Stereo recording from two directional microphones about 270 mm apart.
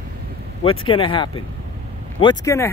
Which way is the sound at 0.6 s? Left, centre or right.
Centre.